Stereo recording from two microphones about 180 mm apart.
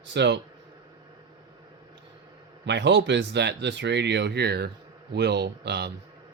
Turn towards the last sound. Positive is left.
turn(degrees=-65)  # may be behind; listen again after turning